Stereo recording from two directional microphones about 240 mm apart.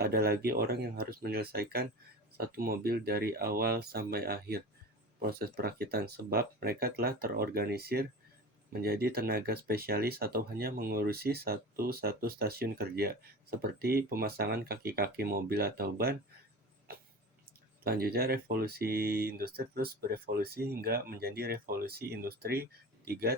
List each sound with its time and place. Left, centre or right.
0.0 s speech: right
16.9 s a sound: right
17.8 s speech: right